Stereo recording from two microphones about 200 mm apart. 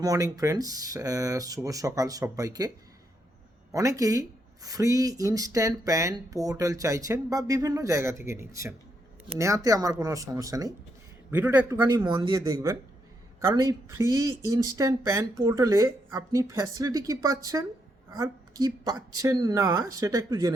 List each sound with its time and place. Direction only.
0.0 s speech: 15° right (ahead or behind)